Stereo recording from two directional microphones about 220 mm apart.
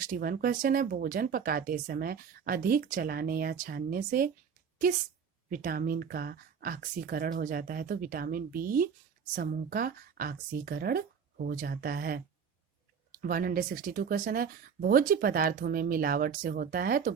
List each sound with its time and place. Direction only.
0.1 s speech: 40° right (ahead or behind)
5.5 s speech: 40° right (ahead or behind)